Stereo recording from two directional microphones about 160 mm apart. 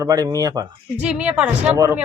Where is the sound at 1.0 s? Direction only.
5° right (ahead or behind).